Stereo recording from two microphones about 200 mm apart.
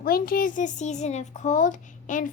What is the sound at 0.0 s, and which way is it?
A child's voice, 45° left (ahead or behind).